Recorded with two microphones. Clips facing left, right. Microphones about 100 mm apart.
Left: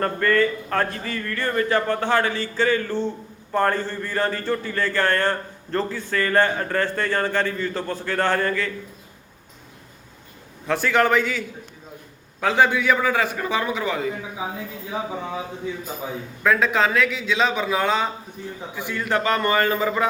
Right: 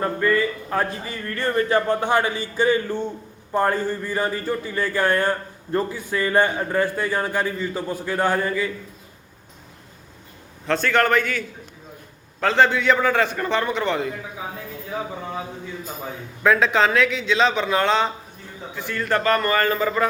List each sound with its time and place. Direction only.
0.0 s speech: 10° right (ahead or behind)
1.1 s a man's voice: 25° right (ahead or behind); by 8.7 s 10° right (ahead or behind)
10.7 s a man's voice: 10° left (ahead or behind)
16.4 s a man's voice: centre (ahead or behind)